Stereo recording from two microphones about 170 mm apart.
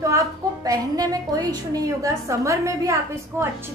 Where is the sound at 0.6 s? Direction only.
20° right (ahead or behind).